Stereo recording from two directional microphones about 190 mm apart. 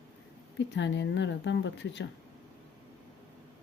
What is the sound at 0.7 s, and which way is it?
Speech, 70° left (ahead or behind).